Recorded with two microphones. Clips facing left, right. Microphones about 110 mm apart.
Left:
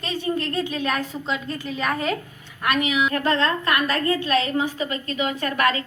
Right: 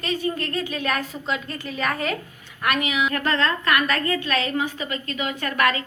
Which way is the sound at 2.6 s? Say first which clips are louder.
Left 1 dB; 30° left (ahead or behind).